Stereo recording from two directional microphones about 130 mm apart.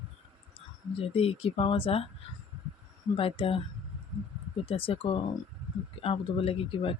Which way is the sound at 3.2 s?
45° left (ahead or behind).